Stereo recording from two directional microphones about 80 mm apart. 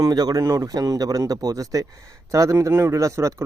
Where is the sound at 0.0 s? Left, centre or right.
Right.